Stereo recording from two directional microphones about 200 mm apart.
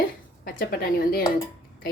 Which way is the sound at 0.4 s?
45° left (ahead or behind).